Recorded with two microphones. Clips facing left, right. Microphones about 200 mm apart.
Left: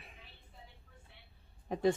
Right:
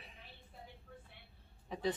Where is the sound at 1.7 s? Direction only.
50° left (ahead or behind).